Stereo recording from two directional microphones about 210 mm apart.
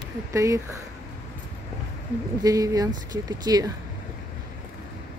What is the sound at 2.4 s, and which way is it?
Speech, 15° right (ahead or behind).